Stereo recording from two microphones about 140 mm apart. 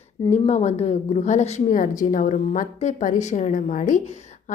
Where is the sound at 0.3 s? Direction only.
55° left (ahead or behind).